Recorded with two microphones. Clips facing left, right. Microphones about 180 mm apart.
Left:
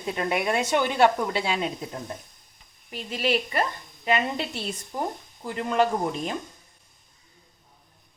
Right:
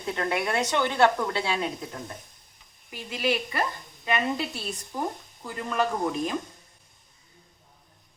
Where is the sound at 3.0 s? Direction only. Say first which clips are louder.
Left 2 dB; 25° left (ahead or behind).